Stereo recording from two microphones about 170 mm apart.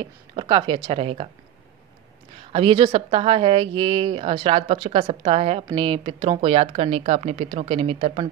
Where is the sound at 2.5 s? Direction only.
35° right (ahead or behind).